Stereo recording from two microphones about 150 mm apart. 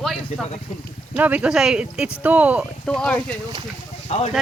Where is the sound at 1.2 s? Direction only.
10° right (ahead or behind).